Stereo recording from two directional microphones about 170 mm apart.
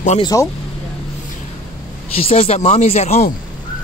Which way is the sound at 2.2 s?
35° left (ahead or behind).